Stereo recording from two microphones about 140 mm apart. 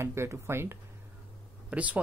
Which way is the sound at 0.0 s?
20° right (ahead or behind).